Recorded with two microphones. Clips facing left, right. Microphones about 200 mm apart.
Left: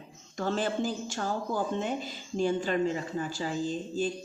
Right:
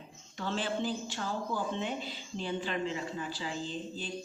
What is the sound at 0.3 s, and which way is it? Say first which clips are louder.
A woman's voice: left 4 dB; 45° left (ahead or behind).